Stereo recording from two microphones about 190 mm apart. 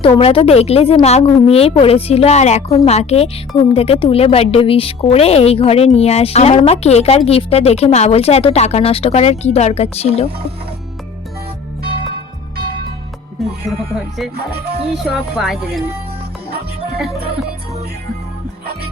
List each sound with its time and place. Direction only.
0.0 s speech: 30° left (ahead or behind)
13.4 s speech: centre (ahead or behind)